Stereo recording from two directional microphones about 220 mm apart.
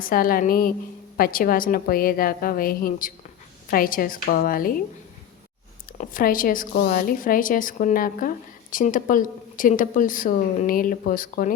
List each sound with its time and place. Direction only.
0.0 s speech: 40° left (ahead or behind)
6.0 s speech: 40° left (ahead or behind)